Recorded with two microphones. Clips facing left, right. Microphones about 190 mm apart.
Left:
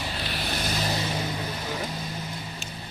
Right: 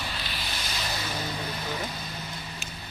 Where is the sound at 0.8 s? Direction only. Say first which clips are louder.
Left 4 dB; 30° left (ahead or behind).